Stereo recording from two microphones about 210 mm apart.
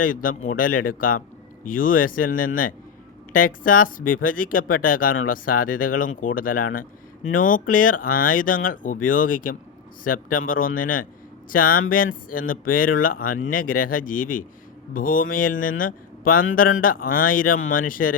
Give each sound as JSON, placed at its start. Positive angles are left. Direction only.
{"t": 0.0, "sound": "speech", "side_deg": 40}